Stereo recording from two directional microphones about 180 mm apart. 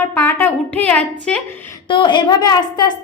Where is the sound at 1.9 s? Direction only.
25° left (ahead or behind).